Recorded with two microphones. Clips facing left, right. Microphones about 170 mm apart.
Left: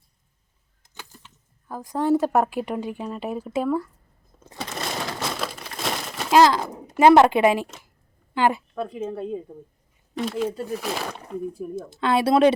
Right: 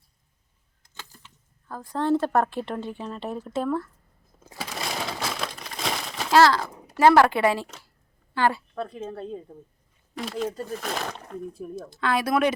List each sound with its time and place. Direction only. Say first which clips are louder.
0.8 s a sound: left 2 dB; 20° left (ahead or behind)
1.6 s speech: left 2 dB; 15° left (ahead or behind)
4.4 s crumpling: left 2 dB; 5° right (ahead or behind)
6.3 s a child's voice: left 2 dB; 20° left (ahead or behind)
11.8 s a woman's voice: left 4 dB; 20° left (ahead or behind)